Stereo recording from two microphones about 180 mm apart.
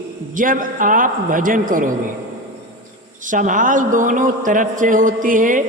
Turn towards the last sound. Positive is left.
turn(degrees=-45)  # may be behind; listen again after turning